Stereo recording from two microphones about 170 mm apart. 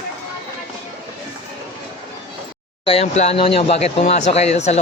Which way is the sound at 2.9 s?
40° left (ahead or behind).